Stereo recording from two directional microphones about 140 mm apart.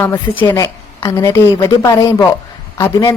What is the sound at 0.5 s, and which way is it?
A woman's voice, 20° left (ahead or behind).